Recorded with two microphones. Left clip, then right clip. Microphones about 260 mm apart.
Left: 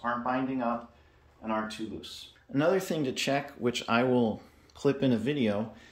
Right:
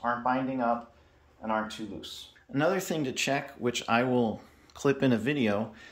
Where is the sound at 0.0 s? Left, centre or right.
Right.